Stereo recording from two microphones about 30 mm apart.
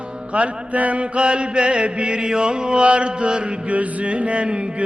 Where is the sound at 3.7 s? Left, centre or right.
Right.